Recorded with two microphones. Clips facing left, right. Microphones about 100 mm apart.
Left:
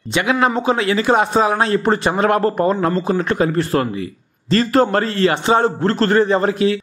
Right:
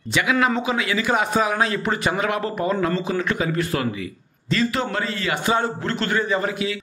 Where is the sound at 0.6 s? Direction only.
35° left (ahead or behind).